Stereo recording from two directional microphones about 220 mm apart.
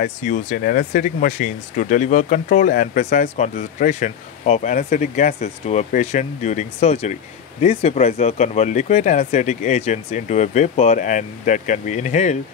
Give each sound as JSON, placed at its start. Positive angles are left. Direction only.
{"t": 0.0, "sound": "speech", "side_deg": 35}